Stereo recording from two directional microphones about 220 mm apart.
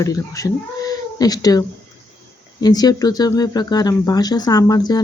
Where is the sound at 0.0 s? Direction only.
15° left (ahead or behind).